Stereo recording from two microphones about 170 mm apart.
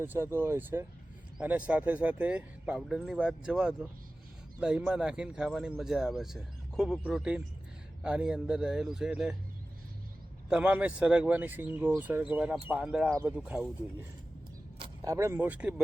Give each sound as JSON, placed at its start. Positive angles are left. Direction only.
{"t": 0.0, "sound": "speech", "side_deg": -15}
{"t": 10.5, "sound": "speech", "side_deg": -10}
{"t": 15.0, "sound": "speech", "side_deg": -20}